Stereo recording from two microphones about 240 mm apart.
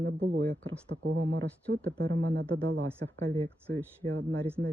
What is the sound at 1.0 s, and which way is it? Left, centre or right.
Speech, right.